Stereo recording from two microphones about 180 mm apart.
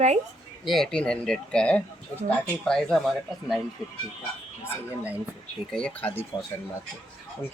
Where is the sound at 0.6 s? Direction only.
Centre (ahead or behind).